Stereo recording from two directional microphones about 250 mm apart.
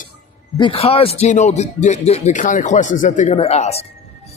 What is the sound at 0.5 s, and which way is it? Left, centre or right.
Speech, left.